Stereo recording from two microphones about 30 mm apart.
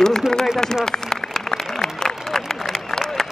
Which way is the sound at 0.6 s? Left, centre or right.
Centre.